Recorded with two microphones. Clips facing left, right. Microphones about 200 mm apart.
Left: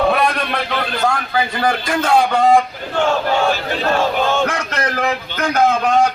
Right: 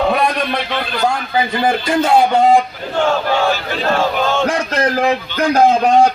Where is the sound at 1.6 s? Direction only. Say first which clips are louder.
Right 4 dB; 20° right (ahead or behind).